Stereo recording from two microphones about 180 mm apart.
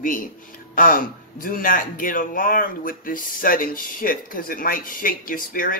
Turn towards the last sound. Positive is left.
turn(degrees=50)  # may be behind; listen again after turning